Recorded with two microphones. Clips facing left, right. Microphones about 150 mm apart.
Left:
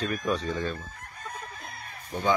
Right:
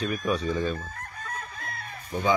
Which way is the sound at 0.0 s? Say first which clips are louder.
Right 1 dB; 10° right (ahead or behind).